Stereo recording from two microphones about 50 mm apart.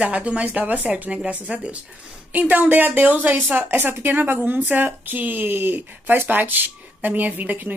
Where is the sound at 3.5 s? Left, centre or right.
Right.